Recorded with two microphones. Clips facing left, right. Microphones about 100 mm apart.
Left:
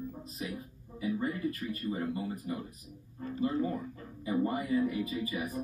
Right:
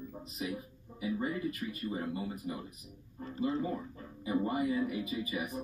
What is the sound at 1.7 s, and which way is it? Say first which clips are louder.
Speech: left 2 dB; 20° right (ahead or behind).